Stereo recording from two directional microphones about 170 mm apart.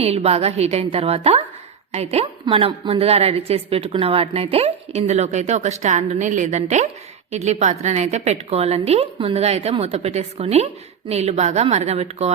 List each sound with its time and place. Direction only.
0.0 s a woman's voice: 35° right (ahead or behind)